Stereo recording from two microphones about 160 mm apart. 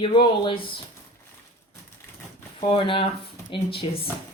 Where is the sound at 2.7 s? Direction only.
35° left (ahead or behind).